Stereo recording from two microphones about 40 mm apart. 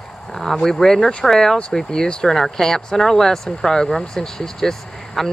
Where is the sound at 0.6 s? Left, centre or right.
Centre.